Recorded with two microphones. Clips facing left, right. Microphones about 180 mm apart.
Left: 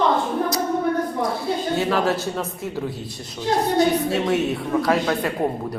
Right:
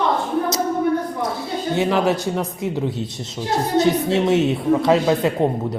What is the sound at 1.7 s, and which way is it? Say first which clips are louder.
Speech: right 4 dB; 20° right (ahead or behind).